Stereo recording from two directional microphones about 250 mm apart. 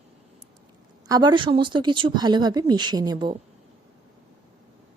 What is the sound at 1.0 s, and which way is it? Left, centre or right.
A woman's voice, centre.